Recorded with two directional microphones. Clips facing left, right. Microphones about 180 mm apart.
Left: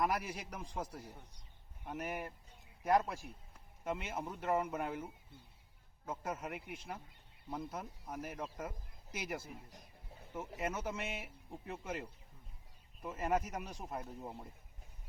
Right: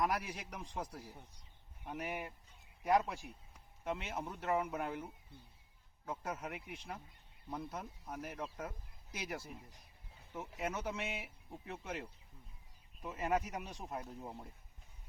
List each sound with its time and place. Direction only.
0.0 s a man's voice: 5° left (ahead or behind)
3.8 s a man's voice: 5° left (ahead or behind)